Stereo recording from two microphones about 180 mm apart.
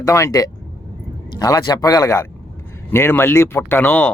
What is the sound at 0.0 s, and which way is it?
A man's voice, 15° left (ahead or behind).